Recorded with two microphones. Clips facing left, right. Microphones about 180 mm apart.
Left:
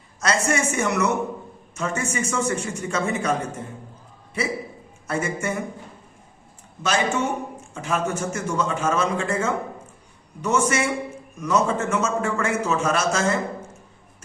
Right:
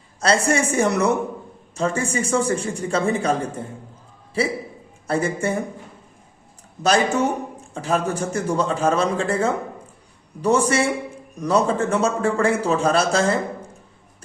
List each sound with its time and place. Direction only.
0.2 s a man's voice: 30° right (ahead or behind)
6.8 s a man's voice: 35° right (ahead or behind)